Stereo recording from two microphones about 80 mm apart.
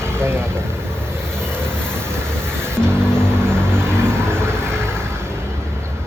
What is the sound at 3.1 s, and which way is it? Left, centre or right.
Vehicle, right.